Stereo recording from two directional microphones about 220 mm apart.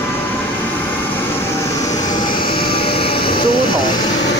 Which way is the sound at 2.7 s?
25° left (ahead or behind).